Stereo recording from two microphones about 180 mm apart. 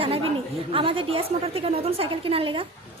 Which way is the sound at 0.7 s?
30° right (ahead or behind).